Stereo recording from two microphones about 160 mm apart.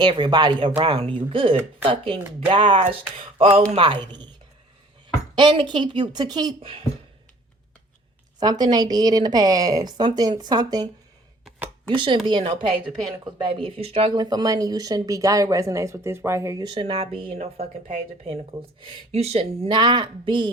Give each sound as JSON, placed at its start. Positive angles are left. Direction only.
{"t": 0.0, "sound": "a woman's voice", "side_deg": -30}
{"t": 5.3, "sound": "speech", "side_deg": -30}
{"t": 8.4, "sound": "speech", "side_deg": -25}
{"t": 11.9, "sound": "a woman's voice", "side_deg": -30}